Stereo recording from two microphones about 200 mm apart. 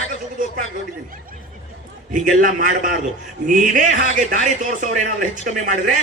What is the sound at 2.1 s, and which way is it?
Speech, 40° right (ahead or behind).